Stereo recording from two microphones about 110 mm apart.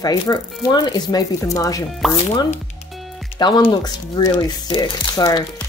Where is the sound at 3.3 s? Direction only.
45° left (ahead or behind).